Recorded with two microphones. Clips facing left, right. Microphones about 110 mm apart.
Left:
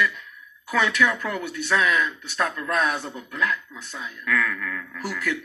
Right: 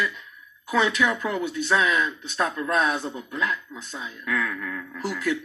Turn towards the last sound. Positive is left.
turn(degrees=-25)  # may be behind; listen again after turning